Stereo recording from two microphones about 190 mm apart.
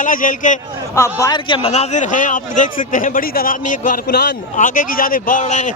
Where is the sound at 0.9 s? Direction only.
15° left (ahead or behind).